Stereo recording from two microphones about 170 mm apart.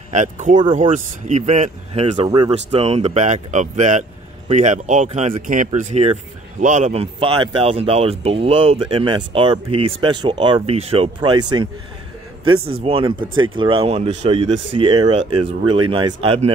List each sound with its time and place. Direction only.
0.1 s speech: 45° right (ahead or behind)
2.2 s speech: 25° right (ahead or behind)
2.5 s speech: 35° right (ahead or behind)
12.8 s speech: 30° right (ahead or behind)